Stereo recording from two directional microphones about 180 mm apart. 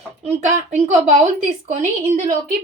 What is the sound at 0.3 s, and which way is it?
Speech, 40° right (ahead or behind).